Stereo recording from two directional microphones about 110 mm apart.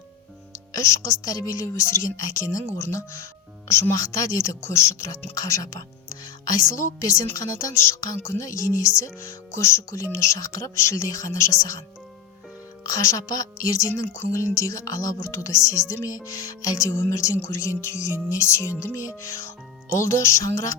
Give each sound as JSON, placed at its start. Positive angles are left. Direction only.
{"t": 0.7, "sound": "a woman's voice", "side_deg": 25}
{"t": 12.8, "sound": "speech", "side_deg": 30}